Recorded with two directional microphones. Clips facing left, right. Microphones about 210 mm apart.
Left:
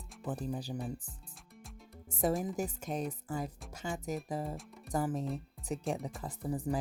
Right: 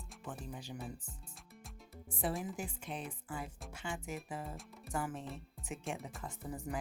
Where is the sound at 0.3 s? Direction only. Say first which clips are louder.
Left 8 dB; 35° left (ahead or behind).